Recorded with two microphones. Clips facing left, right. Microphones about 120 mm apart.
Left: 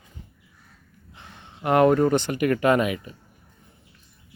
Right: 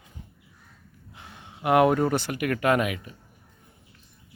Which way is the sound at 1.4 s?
10° right (ahead or behind).